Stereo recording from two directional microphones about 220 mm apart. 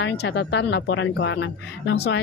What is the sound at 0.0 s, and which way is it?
Speech, 50° left (ahead or behind).